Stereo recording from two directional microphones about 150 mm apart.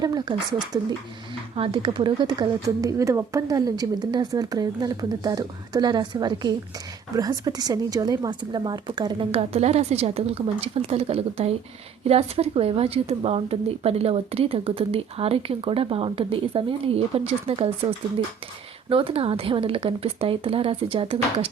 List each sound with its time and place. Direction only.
0.0 s a woman's voice: 25° right (ahead or behind); by 17.7 s 40° right (ahead or behind)
18.9 s a woman's voice: 35° right (ahead or behind)